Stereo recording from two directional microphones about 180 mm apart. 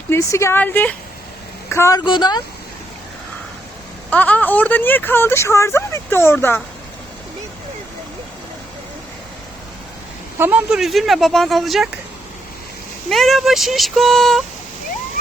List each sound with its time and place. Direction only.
0.1 s a woman's voice: 15° left (ahead or behind)
4.1 s speech: 10° left (ahead or behind)
10.3 s speech: 10° right (ahead or behind)
13.1 s speech: centre (ahead or behind)